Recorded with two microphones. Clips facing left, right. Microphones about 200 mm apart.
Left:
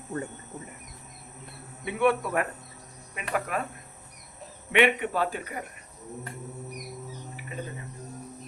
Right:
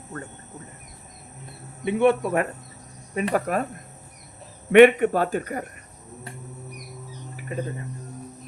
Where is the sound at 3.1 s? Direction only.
40° right (ahead or behind).